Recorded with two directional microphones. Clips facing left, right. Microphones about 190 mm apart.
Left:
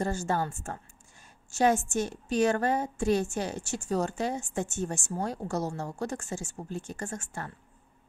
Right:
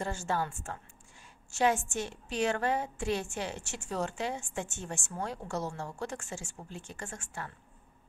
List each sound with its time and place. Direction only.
0.0 s a woman's voice: 40° left (ahead or behind)